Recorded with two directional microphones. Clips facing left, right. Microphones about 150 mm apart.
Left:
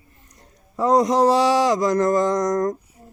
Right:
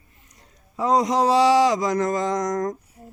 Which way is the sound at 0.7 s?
55° left (ahead or behind).